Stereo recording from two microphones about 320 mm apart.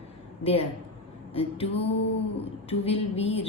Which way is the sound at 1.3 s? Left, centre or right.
Centre.